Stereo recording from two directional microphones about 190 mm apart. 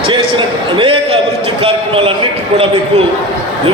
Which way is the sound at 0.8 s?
30° right (ahead or behind).